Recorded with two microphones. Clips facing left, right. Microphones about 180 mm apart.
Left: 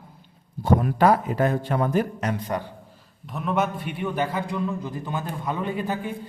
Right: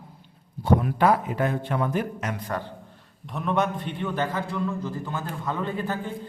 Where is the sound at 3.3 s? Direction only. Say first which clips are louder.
Even; 5° left (ahead or behind).